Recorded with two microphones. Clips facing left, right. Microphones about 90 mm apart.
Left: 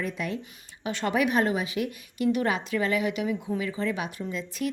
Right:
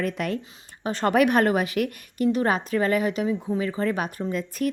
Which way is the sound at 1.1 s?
60° right (ahead or behind).